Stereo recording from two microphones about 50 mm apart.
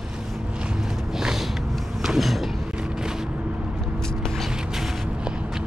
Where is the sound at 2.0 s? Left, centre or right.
Centre.